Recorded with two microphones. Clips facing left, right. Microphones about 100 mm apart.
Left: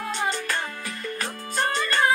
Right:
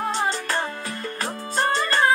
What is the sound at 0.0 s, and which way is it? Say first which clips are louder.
Music: right 3 dB; 35° right (ahead or behind).